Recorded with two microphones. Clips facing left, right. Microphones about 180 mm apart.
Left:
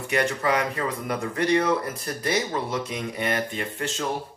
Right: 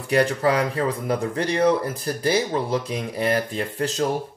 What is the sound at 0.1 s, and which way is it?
Speech, 35° right (ahead or behind).